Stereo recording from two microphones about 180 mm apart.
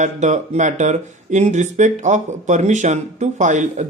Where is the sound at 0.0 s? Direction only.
40° right (ahead or behind).